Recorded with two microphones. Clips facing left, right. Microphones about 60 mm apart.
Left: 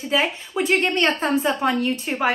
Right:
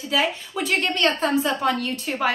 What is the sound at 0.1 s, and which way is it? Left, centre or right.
A woman's voice, left.